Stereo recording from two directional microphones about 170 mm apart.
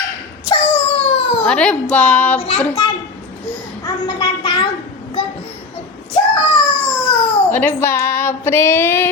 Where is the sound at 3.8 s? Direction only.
25° left (ahead or behind).